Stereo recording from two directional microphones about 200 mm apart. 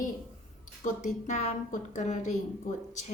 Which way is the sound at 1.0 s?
35° left (ahead or behind).